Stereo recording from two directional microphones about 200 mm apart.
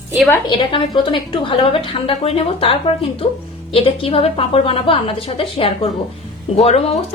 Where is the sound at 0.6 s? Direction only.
25° left (ahead or behind).